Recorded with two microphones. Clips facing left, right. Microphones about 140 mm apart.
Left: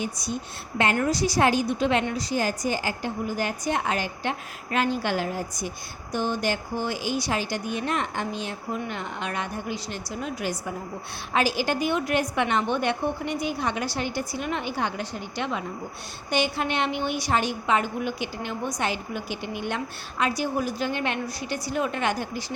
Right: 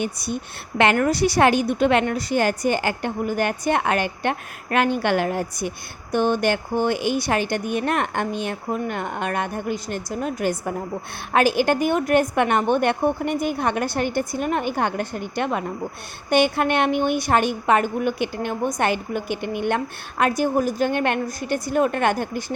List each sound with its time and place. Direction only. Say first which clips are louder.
0.0 s a woman's voice: right 4 dB; 60° right (ahead or behind)